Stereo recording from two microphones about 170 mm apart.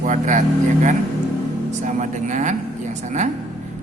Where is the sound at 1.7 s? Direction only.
45° right (ahead or behind).